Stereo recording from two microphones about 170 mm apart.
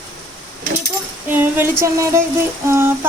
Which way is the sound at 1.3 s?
10° right (ahead or behind).